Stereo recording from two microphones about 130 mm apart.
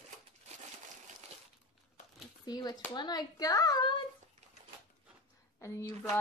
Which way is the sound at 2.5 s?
30° left (ahead or behind).